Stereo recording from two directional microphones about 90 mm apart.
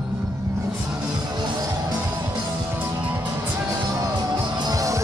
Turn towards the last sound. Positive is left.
turn(degrees=-40)  # may be behind; listen again after turning